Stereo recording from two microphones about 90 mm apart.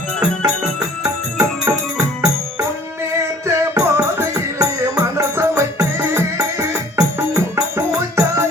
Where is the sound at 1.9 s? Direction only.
45° right (ahead or behind).